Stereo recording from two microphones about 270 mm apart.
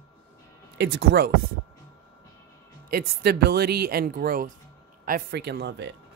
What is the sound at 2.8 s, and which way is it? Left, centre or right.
Speech, right.